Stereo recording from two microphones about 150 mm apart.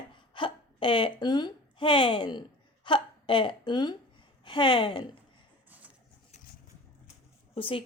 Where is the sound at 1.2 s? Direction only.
30° left (ahead or behind).